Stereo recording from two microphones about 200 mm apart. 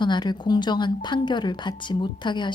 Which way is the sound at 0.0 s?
20° left (ahead or behind).